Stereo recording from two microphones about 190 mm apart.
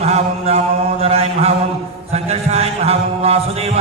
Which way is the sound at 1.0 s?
30° right (ahead or behind).